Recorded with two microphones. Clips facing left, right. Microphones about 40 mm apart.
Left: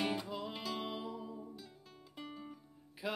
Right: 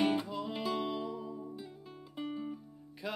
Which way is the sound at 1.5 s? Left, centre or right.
Centre.